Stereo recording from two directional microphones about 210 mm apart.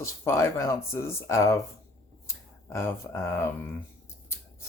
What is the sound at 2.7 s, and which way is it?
Speech, 10° left (ahead or behind).